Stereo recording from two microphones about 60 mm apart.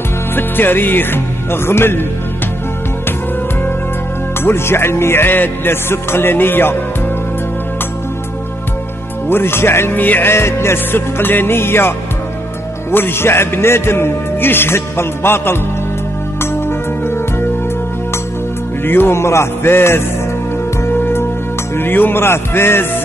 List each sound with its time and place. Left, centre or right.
0.4 s speech: left
4.4 s a man's voice: left
9.3 s a man's voice: left
12.9 s a man's voice: left
16.5 s music: left
18.9 s a man's voice: left
20.9 s music: left
21.7 s a man's voice: left